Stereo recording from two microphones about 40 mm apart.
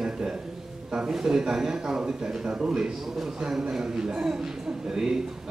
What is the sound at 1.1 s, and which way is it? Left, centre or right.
A man's voice, centre.